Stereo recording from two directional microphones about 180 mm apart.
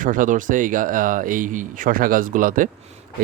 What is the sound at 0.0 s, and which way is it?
Speech, 45° right (ahead or behind).